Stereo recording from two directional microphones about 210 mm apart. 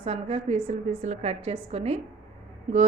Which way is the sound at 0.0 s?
30° right (ahead or behind).